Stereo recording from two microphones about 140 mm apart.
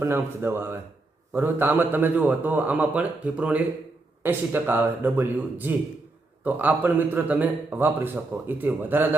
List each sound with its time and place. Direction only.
0.0 s a man's voice: 15° right (ahead or behind)